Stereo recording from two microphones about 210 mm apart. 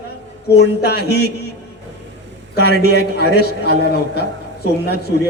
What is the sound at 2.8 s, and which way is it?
A man's voice, 50° left (ahead or behind).